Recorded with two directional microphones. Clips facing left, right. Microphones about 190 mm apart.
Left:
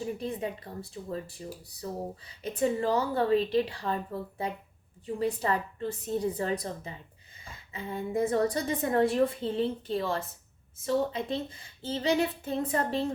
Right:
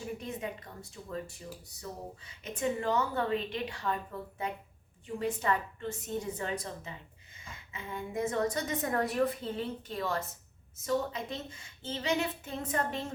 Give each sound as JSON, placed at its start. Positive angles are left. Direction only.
{"t": 0.2, "sound": "a woman's voice", "side_deg": 35}